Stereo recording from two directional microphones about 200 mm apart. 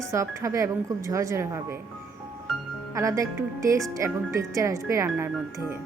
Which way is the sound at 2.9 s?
15° right (ahead or behind).